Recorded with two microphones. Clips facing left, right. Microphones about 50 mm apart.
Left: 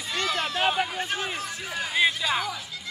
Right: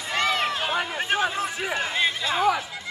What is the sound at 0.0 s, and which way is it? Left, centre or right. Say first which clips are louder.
Run: right 4 dB; right.